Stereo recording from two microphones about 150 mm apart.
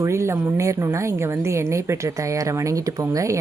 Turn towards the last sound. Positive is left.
turn(degrees=-20)  # may be behind; listen again after turning